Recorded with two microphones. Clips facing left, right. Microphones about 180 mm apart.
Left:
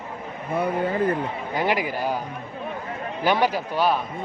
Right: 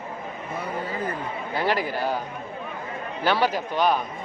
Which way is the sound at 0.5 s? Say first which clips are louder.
Left 8 dB; 55° left (ahead or behind).